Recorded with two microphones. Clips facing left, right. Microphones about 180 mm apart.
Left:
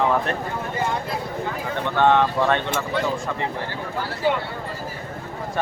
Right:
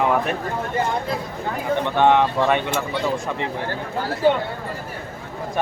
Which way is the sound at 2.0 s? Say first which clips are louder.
Even; 15° right (ahead or behind).